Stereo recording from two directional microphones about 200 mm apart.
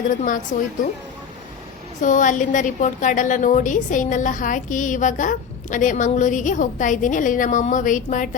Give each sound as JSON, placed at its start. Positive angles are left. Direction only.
{"t": 0.1, "sound": "a woman's voice", "side_deg": 40}
{"t": 2.0, "sound": "a woman's voice", "side_deg": 40}